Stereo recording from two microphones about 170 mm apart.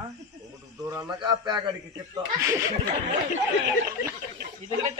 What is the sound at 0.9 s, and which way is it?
Speech, 20° right (ahead or behind).